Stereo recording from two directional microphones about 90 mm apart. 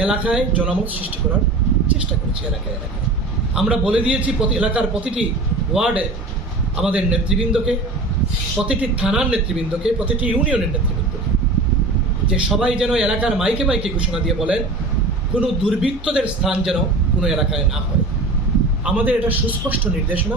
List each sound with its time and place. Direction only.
0.0 s speech: 10° right (ahead or behind)
3.5 s speech: 10° right (ahead or behind)
12.3 s a man's voice: 10° right (ahead or behind)
18.9 s speech: 15° right (ahead or behind)